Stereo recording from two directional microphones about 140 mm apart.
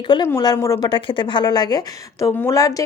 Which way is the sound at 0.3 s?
25° left (ahead or behind).